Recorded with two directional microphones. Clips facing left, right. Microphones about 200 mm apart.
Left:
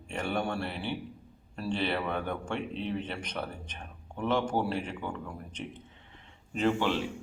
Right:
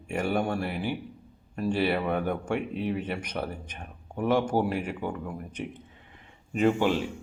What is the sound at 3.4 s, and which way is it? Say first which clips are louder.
Speech: right 3 dB; 25° right (ahead or behind).